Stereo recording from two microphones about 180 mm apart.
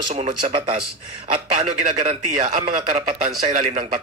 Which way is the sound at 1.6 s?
45° right (ahead or behind).